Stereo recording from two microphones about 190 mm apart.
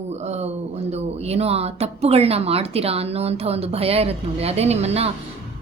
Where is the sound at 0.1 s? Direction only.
35° right (ahead or behind).